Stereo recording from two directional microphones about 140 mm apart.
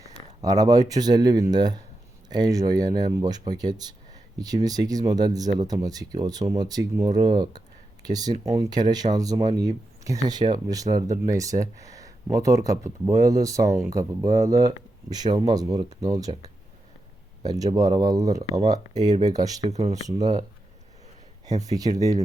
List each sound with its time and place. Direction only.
0.4 s speech: 25° right (ahead or behind)
17.4 s speech: 30° right (ahead or behind)
21.4 s speech: 25° right (ahead or behind)